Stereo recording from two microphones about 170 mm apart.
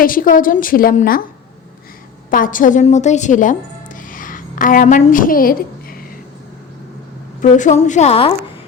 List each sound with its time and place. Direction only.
0.0 s a woman's voice: 55° left (ahead or behind)
2.3 s speech: 50° left (ahead or behind)
7.5 s a woman's voice: 45° left (ahead or behind)